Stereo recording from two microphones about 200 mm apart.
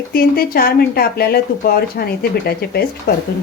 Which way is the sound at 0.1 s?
50° left (ahead or behind).